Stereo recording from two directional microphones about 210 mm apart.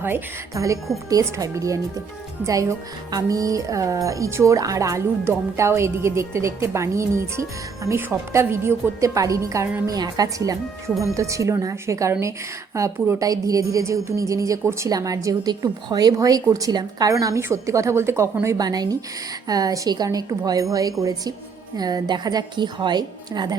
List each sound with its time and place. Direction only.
0.0 s a woman's voice: 15° right (ahead or behind)